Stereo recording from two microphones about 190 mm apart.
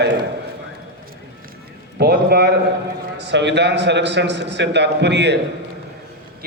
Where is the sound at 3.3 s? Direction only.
65° right (ahead or behind).